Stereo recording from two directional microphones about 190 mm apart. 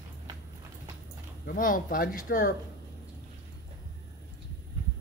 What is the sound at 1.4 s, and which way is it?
Speech, 45° left (ahead or behind).